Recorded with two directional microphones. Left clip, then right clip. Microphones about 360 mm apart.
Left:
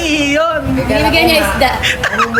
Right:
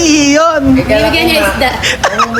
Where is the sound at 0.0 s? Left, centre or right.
Centre.